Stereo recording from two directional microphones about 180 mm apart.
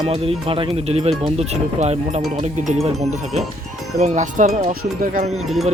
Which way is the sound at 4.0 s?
40° right (ahead or behind).